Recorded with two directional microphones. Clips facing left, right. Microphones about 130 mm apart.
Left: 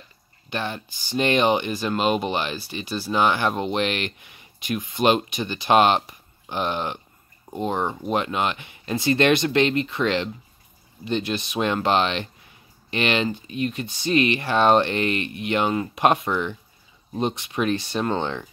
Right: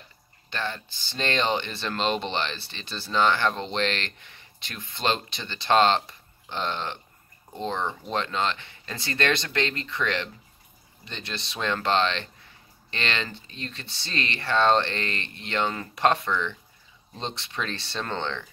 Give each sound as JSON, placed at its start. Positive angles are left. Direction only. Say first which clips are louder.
{"t": 0.5, "sound": "speech", "louder": "left 3 dB", "side_deg": 15}